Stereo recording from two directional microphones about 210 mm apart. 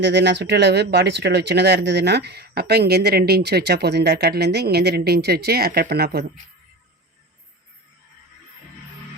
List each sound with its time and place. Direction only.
0.0 s speech: 55° right (ahead or behind)